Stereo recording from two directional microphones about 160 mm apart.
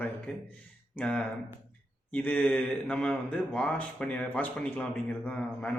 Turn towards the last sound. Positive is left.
turn(degrees=10)  # may be behind; listen again after turning